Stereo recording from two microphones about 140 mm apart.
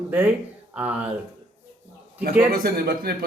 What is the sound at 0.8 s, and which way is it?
Speech, 10° right (ahead or behind).